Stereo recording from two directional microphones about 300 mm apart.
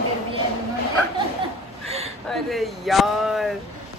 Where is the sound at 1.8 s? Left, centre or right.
Right.